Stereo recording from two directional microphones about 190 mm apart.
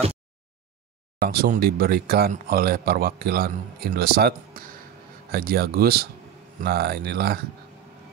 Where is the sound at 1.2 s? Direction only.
50° right (ahead or behind).